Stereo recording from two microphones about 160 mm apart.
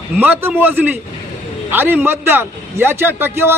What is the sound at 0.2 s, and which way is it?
A man's voice, 10° right (ahead or behind).